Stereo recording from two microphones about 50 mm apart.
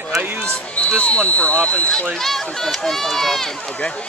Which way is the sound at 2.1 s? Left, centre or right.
Centre.